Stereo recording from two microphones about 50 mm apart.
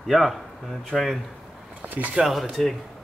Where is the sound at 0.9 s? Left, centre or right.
Centre.